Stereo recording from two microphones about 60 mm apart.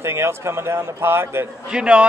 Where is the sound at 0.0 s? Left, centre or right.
Right.